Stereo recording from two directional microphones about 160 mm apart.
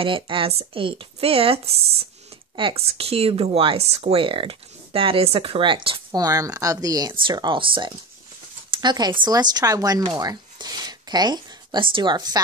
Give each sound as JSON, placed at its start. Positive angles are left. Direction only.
{"t": 0.0, "sound": "speech", "side_deg": -35}